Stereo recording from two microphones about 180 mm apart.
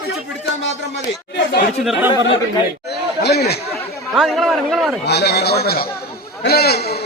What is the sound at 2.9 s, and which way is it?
Speech, 65° left (ahead or behind).